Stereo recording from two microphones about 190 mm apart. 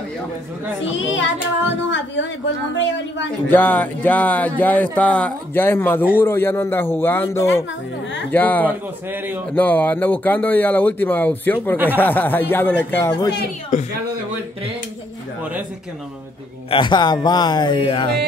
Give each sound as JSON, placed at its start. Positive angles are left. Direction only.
{"t": 3.4, "sound": "speech", "side_deg": 10}
{"t": 8.6, "sound": "a man's voice", "side_deg": -10}
{"t": 9.6, "sound": "speech", "side_deg": 10}
{"t": 11.7, "sound": "a man's voice", "side_deg": -10}
{"t": 12.0, "sound": "speech", "side_deg": 10}
{"t": 13.3, "sound": "a woman's voice", "side_deg": 55}
{"t": 16.7, "sound": "speech", "side_deg": 25}